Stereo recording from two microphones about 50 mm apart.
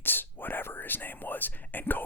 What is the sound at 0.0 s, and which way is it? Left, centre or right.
Speech, left.